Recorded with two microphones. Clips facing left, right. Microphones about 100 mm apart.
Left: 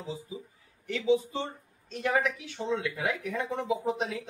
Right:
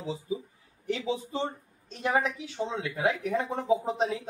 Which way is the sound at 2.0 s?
25° right (ahead or behind).